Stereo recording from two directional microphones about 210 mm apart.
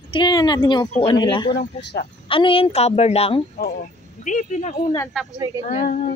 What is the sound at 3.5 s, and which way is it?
Speech, 45° left (ahead or behind).